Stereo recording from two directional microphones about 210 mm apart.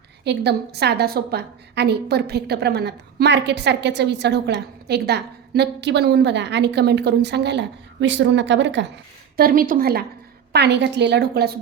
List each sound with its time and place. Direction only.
0.3 s a woman's voice: 50° right (ahead or behind)
9.3 s a woman's voice: 45° right (ahead or behind)